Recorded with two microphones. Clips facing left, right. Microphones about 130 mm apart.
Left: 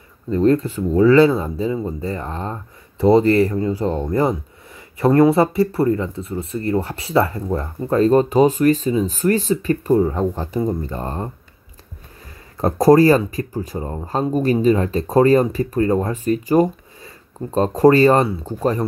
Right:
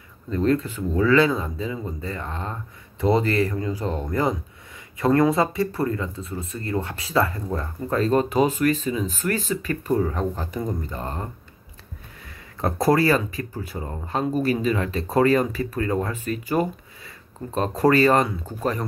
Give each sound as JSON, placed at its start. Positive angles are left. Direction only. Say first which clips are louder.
{"t": 0.3, "sound": "speech", "louder": "left 6 dB", "side_deg": 25}
{"t": 12.5, "sound": "speech", "louder": "left 8 dB", "side_deg": 35}